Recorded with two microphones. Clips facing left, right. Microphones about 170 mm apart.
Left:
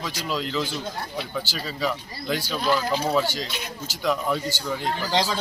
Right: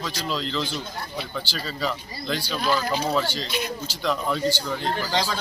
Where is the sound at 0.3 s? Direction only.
10° left (ahead or behind).